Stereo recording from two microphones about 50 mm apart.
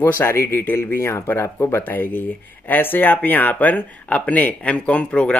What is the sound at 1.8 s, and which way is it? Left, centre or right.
Speech, left.